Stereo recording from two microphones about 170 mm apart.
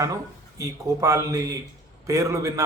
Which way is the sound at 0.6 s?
15° right (ahead or behind).